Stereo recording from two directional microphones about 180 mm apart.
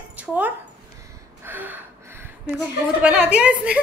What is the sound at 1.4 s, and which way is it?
Gasp, 10° right (ahead or behind).